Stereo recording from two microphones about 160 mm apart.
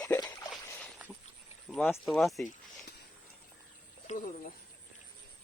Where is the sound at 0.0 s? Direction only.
25° left (ahead or behind).